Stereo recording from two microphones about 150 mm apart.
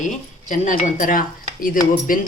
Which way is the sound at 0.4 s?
55° left (ahead or behind).